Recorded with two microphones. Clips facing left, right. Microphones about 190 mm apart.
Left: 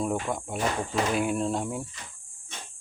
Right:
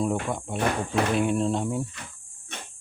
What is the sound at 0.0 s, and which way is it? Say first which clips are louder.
Speech: right 2 dB; centre (ahead or behind).